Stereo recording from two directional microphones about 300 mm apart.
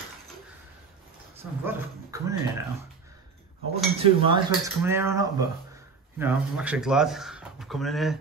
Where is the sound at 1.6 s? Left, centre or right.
Centre.